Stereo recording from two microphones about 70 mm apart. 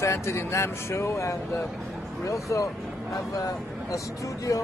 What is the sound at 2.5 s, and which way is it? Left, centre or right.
Speech, left.